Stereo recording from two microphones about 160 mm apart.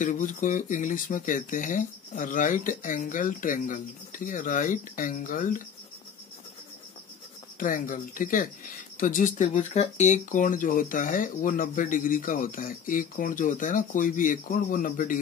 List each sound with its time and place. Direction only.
0.0 s speech: 55° left (ahead or behind)
7.5 s speech: 55° left (ahead or behind)